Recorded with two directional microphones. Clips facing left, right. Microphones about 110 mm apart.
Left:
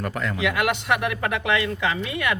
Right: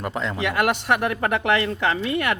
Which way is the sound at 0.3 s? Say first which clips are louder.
Right 2 dB; 45° right (ahead or behind).